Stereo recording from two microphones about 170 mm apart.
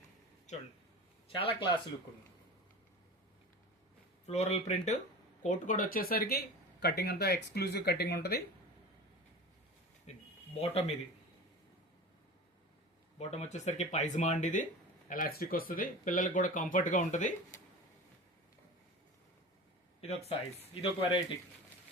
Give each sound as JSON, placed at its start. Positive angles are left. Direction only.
{"t": 0.5, "sound": "speech", "side_deg": 45}
{"t": 1.3, "sound": "speech", "side_deg": 30}
{"t": 4.3, "sound": "speech", "side_deg": 40}
{"t": 10.1, "sound": "speech", "side_deg": 40}
{"t": 13.1, "sound": "speech", "side_deg": 40}
{"t": 15.1, "sound": "speech", "side_deg": 60}
{"t": 20.0, "sound": "speech", "side_deg": 35}